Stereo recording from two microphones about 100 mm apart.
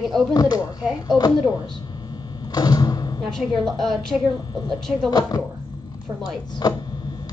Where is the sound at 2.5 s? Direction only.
40° left (ahead or behind).